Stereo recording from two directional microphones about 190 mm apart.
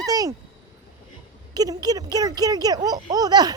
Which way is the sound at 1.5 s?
20° right (ahead or behind).